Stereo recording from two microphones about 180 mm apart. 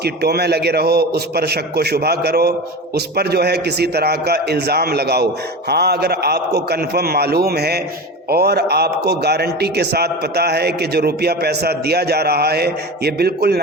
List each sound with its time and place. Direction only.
0.0 s a man's voice: 65° right (ahead or behind)